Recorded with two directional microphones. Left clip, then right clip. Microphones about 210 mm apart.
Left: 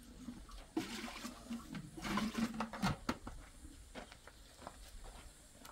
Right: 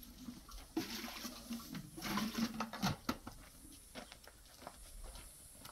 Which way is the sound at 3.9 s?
5° left (ahead or behind).